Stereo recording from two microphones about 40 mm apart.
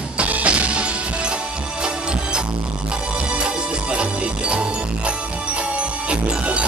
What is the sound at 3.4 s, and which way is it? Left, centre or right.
Music, right.